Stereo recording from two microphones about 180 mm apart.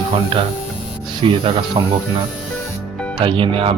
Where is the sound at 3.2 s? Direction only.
30° right (ahead or behind).